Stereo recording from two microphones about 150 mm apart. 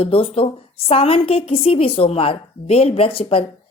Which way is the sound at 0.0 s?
40° left (ahead or behind).